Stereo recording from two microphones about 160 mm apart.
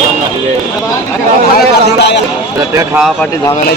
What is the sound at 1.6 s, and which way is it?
Speech, 90° left.